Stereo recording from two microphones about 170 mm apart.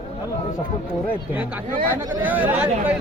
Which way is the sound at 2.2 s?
10° right (ahead or behind).